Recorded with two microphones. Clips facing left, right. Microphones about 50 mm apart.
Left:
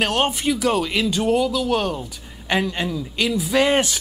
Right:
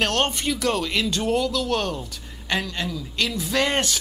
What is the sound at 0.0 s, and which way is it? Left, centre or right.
Speech, centre.